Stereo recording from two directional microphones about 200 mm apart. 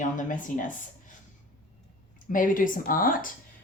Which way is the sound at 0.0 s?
40° left (ahead or behind).